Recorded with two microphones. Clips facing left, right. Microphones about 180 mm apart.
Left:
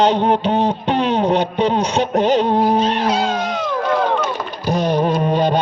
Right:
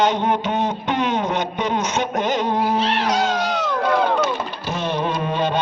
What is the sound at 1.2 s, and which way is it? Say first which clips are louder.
Speech: left 6 dB; 30° left (ahead or behind).